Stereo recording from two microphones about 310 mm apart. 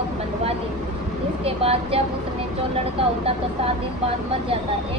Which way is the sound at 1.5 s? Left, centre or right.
Centre.